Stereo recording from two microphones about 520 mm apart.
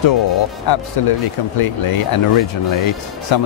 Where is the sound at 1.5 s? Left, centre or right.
Left.